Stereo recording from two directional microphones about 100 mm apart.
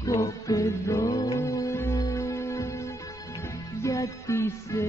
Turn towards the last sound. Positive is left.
turn(degrees=25)  # may be behind; listen again after turning